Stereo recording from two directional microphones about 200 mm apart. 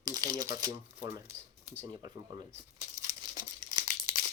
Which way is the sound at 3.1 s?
20° right (ahead or behind).